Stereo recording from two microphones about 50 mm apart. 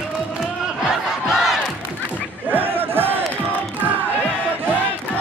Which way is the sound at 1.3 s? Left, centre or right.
Centre.